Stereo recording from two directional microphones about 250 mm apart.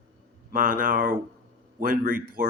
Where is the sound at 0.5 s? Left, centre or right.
Right.